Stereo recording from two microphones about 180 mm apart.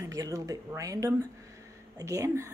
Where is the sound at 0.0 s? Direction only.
20° right (ahead or behind).